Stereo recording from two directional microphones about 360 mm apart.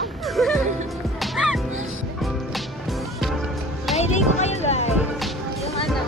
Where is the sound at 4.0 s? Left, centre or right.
Centre.